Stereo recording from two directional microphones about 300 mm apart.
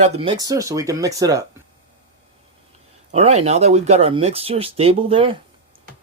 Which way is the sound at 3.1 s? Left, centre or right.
Right.